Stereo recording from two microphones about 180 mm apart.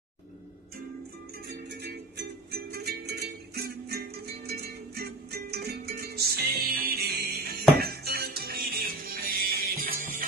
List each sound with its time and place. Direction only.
1.7 s music: 65° right (ahead or behind); by 10.2 s 50° right (ahead or behind)